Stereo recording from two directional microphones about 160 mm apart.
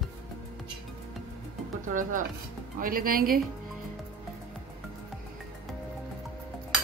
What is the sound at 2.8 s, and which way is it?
Speech, 60° right (ahead or behind).